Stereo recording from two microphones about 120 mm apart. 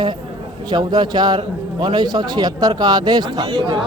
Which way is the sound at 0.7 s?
35° right (ahead or behind).